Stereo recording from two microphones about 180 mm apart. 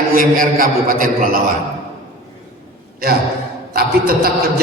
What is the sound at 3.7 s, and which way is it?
Speech, 55° right (ahead or behind).